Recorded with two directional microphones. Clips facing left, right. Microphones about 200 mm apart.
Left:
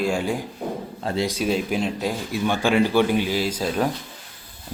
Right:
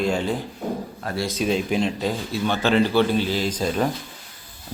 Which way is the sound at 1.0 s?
20° left (ahead or behind).